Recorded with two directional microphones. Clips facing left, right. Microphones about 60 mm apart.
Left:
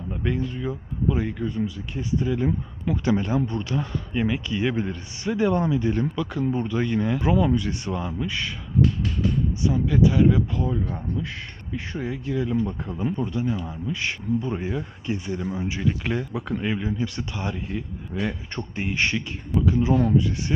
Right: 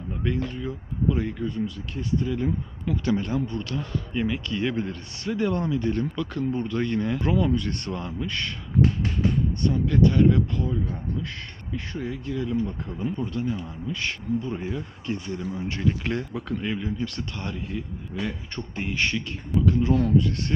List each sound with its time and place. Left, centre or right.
0.2 s speech: centre
8.8 s a sound: right
9.6 s speech: centre
11.7 s speech: centre
12.6 s speech: left
13.1 s speech: centre